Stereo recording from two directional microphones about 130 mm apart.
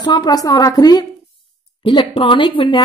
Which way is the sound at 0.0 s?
30° left (ahead or behind).